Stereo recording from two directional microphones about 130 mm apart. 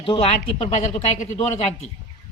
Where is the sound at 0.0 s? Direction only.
45° left (ahead or behind).